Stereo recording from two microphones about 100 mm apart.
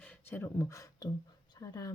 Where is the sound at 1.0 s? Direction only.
35° left (ahead or behind).